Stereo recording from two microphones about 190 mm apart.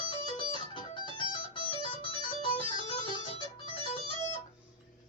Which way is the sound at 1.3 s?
25° left (ahead or behind).